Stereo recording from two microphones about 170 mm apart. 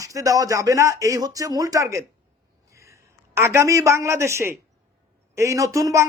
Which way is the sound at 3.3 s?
15° right (ahead or behind).